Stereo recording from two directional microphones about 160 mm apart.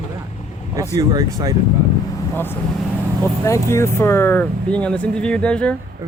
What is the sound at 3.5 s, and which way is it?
Speech, 20° left (ahead or behind).